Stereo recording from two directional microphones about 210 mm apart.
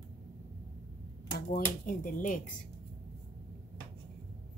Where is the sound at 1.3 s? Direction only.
40° left (ahead or behind).